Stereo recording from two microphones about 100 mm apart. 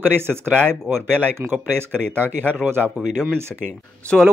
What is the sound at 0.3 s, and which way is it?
Speech, 5° left (ahead or behind).